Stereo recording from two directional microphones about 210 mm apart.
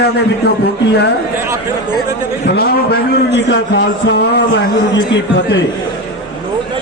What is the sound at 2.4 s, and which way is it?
A man's voice, 50° left (ahead or behind).